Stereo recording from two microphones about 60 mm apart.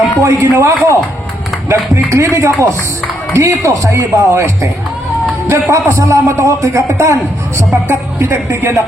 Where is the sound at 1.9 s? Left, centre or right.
Right.